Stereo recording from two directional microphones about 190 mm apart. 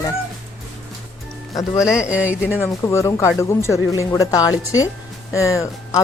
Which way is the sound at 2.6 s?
15° left (ahead or behind).